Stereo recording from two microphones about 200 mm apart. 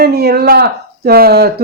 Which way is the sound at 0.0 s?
50° right (ahead or behind).